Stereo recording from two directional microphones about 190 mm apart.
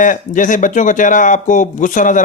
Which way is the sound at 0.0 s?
45° left (ahead or behind).